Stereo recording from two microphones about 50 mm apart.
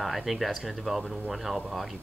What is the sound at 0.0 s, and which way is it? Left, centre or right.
Speech, centre.